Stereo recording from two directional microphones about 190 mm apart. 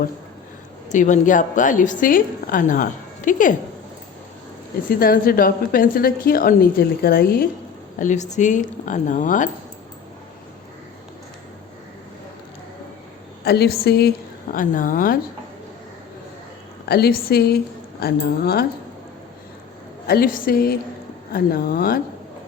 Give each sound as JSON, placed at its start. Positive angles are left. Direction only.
{"t": 0.9, "sound": "a woman's voice", "side_deg": 40}
{"t": 4.9, "sound": "a woman's voice", "side_deg": 50}
{"t": 7.9, "sound": "speech", "side_deg": 40}
{"t": 13.4, "sound": "a woman's voice", "side_deg": 55}
{"t": 14.5, "sound": "a woman's voice", "side_deg": 45}
{"t": 16.8, "sound": "a woman's voice", "side_deg": 55}
{"t": 20.1, "sound": "a woman's voice", "side_deg": 50}